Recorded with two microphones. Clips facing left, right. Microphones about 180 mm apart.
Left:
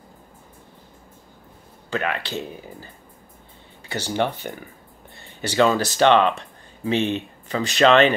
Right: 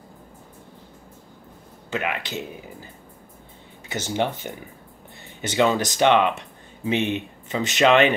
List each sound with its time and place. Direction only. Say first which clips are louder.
1.9 s speech: left 2 dB; 15° right (ahead or behind)
3.9 s speech: left 1 dB; 15° right (ahead or behind)